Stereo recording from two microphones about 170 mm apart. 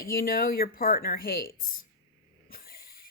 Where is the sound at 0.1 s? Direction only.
60° left (ahead or behind).